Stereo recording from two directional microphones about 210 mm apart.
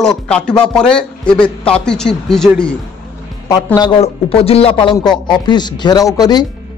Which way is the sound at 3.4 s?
15° left (ahead or behind).